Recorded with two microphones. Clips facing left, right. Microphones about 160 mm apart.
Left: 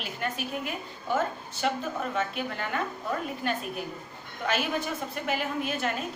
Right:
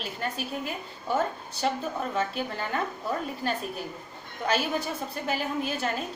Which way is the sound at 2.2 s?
35° right (ahead or behind).